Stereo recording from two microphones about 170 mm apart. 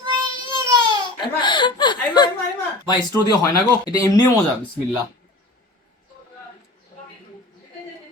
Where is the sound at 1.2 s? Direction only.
30° left (ahead or behind).